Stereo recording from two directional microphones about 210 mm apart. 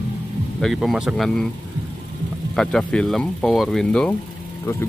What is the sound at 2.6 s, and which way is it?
Speech, centre (ahead or behind).